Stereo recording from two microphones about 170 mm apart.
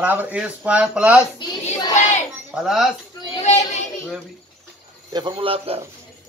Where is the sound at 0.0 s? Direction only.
10° right (ahead or behind).